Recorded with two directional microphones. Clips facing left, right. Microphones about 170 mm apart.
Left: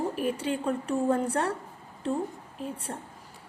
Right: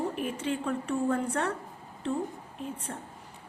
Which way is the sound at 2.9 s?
30° left (ahead or behind).